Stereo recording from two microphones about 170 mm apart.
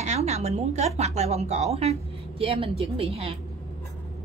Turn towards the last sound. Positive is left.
turn(degrees=-35)  # may be behind; listen again after turning